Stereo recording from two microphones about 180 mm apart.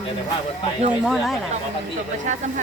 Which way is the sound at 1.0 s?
Centre (ahead or behind).